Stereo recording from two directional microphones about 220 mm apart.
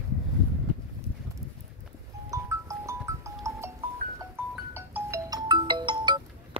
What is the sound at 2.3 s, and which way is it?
Music, 15° right (ahead or behind).